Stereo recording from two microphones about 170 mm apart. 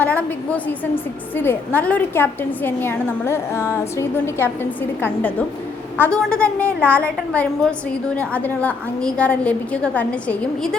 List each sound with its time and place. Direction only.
0.0 s a woman's voice: 10° left (ahead or behind)